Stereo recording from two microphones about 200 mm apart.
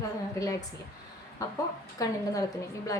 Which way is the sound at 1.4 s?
20° left (ahead or behind).